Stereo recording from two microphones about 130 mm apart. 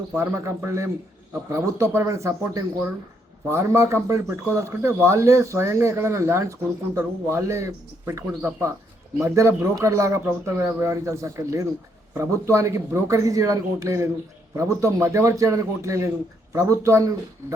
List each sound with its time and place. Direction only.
0.2 s a man's voice: 20° right (ahead or behind)